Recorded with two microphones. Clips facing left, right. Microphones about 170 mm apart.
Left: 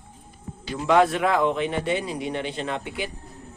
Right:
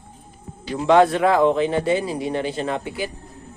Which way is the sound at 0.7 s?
30° right (ahead or behind).